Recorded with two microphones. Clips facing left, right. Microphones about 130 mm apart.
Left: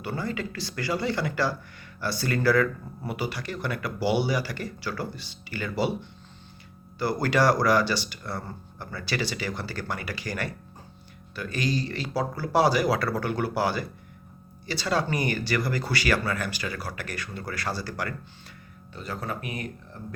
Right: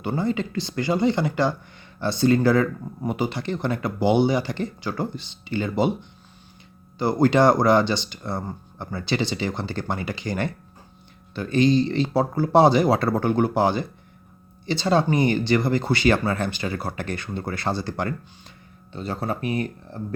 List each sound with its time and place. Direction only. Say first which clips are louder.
0.0 s speech: right 6 dB; 20° right (ahead or behind)